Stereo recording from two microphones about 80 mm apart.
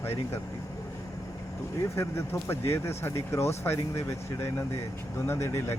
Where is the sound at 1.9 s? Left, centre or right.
Left.